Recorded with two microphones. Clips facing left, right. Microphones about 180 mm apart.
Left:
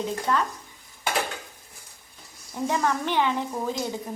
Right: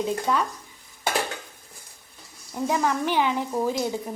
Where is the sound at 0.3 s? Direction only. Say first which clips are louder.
Even; 10° right (ahead or behind).